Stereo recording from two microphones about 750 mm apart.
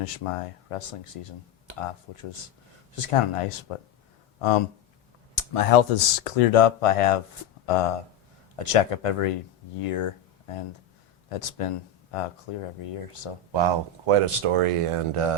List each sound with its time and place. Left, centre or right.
0.0 s speech: left
13.5 s speech: right